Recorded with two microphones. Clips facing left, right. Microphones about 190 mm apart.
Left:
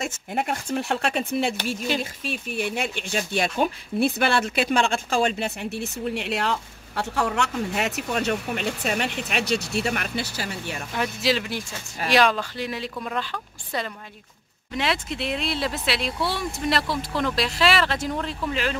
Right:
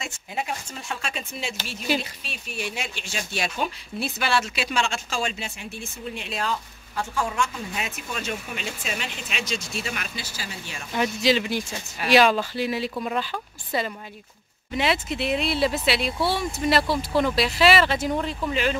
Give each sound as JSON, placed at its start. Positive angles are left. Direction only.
{"t": 0.3, "sound": "speech", "side_deg": 55}
{"t": 10.9, "sound": "speech", "side_deg": 0}